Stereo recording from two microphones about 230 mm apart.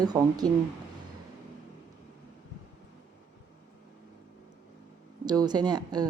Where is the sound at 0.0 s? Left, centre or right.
Centre.